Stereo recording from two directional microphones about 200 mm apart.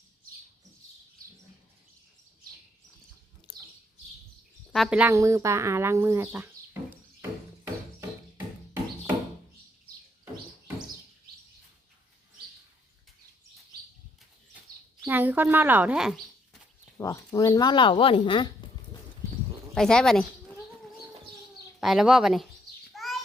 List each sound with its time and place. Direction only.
4.7 s speech: centre (ahead or behind)
15.0 s a woman's voice: 10° right (ahead or behind)
17.0 s speech: 15° left (ahead or behind)
18.9 s horse: 20° left (ahead or behind)
19.7 s speech: 5° left (ahead or behind)
21.8 s speech: centre (ahead or behind)
23.0 s a sound: centre (ahead or behind)